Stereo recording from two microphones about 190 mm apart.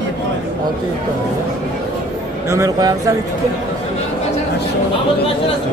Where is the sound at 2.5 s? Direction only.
20° right (ahead or behind).